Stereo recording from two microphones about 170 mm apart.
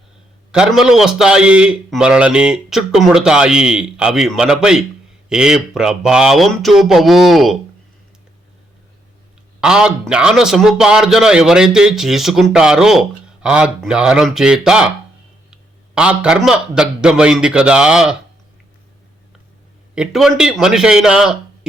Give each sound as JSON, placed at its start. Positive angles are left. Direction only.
{"t": 0.5, "sound": "a man's voice", "side_deg": -5}
{"t": 9.6, "sound": "a man's voice", "side_deg": -5}
{"t": 16.0, "sound": "a man's voice", "side_deg": -5}
{"t": 20.0, "sound": "a man's voice", "side_deg": 0}